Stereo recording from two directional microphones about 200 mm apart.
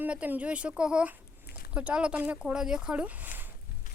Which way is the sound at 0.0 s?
10° right (ahead or behind).